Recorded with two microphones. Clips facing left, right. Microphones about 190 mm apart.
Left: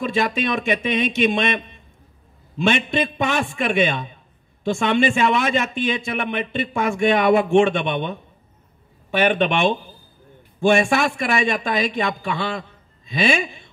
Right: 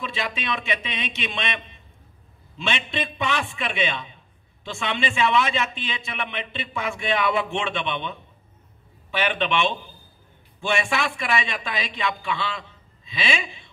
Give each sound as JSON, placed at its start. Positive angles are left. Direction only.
{"t": 0.0, "sound": "a man's voice", "side_deg": 45}